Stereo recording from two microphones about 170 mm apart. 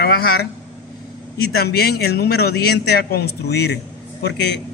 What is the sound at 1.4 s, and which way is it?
A man's voice, 70° left (ahead or behind).